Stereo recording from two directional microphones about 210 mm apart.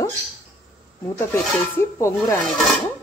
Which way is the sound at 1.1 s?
15° left (ahead or behind).